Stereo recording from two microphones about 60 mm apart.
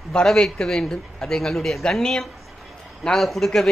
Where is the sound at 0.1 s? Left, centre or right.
Centre.